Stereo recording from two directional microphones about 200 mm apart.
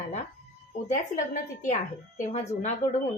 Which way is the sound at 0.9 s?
35° left (ahead or behind).